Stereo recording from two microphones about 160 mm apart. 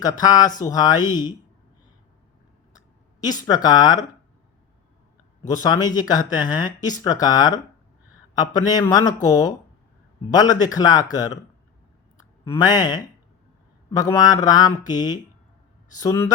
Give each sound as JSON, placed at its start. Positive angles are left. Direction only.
{"t": 0.2, "sound": "speech", "side_deg": 25}
{"t": 2.7, "sound": "speech", "side_deg": 25}
{"t": 5.4, "sound": "speech", "side_deg": 25}
{"t": 12.1, "sound": "a sound", "side_deg": 25}
{"t": 13.9, "sound": "speech", "side_deg": 25}